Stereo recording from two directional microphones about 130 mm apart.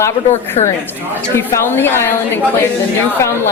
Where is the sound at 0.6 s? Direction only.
60° left (ahead or behind).